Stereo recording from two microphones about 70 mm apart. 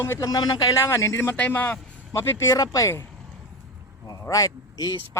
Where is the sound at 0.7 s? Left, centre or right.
Left.